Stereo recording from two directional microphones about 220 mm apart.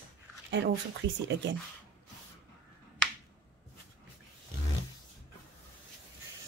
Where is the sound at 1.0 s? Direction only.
55° right (ahead or behind).